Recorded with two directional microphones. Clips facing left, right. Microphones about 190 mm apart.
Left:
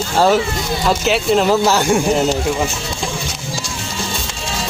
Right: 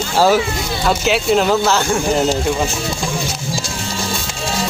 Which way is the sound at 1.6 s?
15° left (ahead or behind).